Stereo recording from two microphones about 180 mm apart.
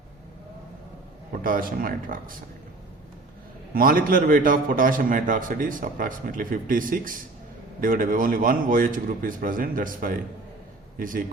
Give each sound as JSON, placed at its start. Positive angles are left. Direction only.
{"t": 1.5, "sound": "a man's voice", "side_deg": -50}
{"t": 3.8, "sound": "a man's voice", "side_deg": -50}